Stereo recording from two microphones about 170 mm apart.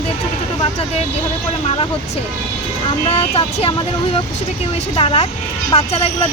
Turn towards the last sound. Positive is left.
turn(degrees=35)  # may be behind; listen again after turning